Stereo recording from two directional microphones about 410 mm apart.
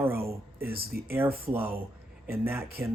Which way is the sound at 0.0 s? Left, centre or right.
Centre.